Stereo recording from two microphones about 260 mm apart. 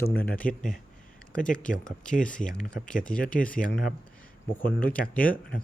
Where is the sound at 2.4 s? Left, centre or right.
Centre.